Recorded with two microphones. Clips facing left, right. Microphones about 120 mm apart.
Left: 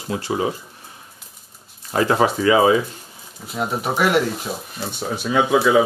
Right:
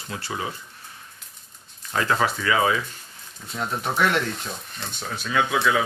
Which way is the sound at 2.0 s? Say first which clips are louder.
Left 6 dB; 20° left (ahead or behind).